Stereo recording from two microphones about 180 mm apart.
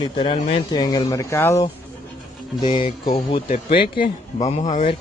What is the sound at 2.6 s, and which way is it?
A man's voice, 25° left (ahead or behind).